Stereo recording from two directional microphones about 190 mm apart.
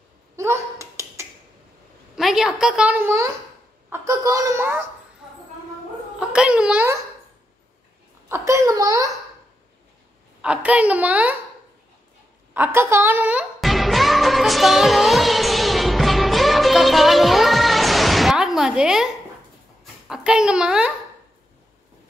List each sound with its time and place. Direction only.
0.4 s finger snapping: 15° right (ahead or behind)
2.1 s a woman's voice: centre (ahead or behind)
6.1 s a child's voice: 5° right (ahead or behind)
8.3 s a child's voice: 15° right (ahead or behind)
10.4 s a child's voice: 5° right (ahead or behind)
12.5 s music: 10° right (ahead or behind)
19.8 s a sound: 5° right (ahead or behind)